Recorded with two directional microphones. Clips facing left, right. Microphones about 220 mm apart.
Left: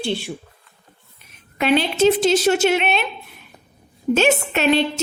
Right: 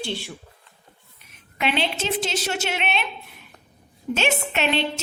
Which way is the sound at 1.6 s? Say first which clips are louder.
Left 8 dB; 40° left (ahead or behind).